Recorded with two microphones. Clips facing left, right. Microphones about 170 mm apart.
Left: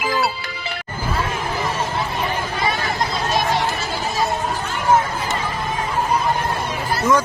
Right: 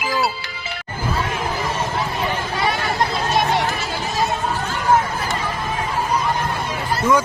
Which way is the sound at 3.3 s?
60° right (ahead or behind).